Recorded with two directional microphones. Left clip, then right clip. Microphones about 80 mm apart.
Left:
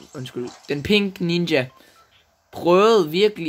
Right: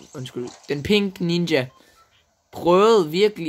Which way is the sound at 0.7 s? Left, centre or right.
Centre.